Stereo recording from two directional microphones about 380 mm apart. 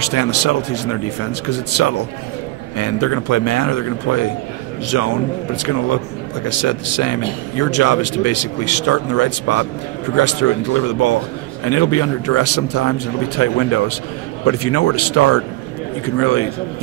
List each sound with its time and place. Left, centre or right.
0.0 s speech: left